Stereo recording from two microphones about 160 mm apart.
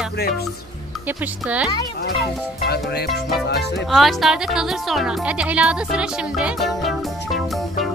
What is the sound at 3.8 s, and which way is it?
Speech, centre (ahead or behind).